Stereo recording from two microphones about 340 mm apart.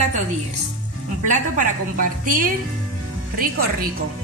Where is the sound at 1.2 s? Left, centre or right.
Right.